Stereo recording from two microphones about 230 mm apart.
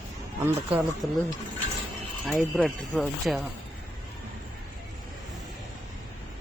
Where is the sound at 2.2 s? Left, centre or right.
Centre.